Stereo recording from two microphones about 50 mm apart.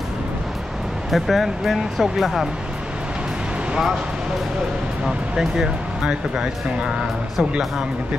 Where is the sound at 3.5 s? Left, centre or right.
Centre.